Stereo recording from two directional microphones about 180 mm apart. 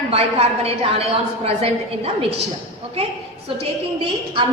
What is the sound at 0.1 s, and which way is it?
Speech, 35° right (ahead or behind).